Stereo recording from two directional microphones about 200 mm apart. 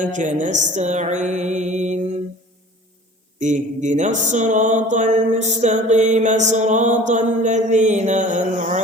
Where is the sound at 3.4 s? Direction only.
35° right (ahead or behind).